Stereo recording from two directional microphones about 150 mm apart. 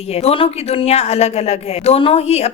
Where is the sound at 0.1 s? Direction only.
40° left (ahead or behind).